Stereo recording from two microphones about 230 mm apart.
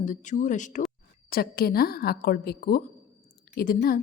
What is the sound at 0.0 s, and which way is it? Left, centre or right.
A woman's voice, left.